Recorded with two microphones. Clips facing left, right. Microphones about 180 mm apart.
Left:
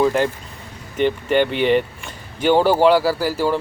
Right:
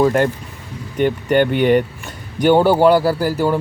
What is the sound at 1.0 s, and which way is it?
Speech, 50° right (ahead or behind).